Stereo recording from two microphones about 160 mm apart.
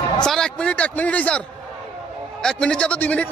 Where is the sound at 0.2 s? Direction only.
5° left (ahead or behind).